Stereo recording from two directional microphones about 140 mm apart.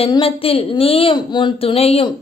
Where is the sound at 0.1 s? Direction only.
40° left (ahead or behind).